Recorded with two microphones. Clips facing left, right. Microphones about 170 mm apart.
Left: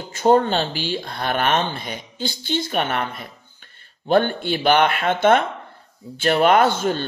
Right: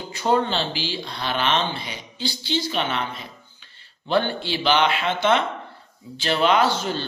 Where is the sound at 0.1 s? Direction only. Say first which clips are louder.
Left 5 dB; 45° left (ahead or behind).